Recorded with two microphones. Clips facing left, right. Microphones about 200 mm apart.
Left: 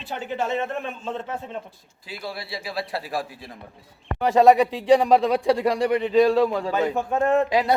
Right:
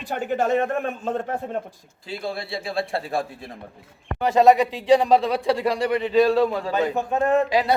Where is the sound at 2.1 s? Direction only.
25° right (ahead or behind).